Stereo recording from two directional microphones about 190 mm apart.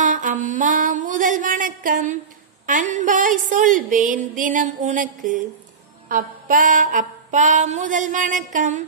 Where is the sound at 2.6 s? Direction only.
40° right (ahead or behind).